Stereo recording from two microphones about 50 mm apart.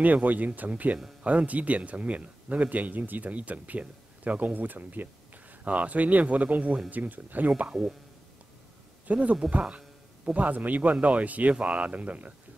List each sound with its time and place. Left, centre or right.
0.0 s speech: right
9.0 s speech: right
9.5 s a sound: right
10.4 s speech: right